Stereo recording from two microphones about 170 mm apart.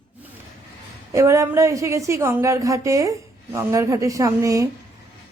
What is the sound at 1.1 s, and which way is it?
A woman's voice, 15° right (ahead or behind).